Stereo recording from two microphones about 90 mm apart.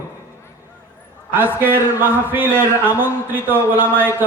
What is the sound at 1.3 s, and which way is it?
Speech, 20° right (ahead or behind).